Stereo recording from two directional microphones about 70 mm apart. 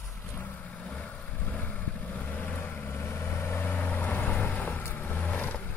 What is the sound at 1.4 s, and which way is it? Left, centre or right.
Vehicle, left.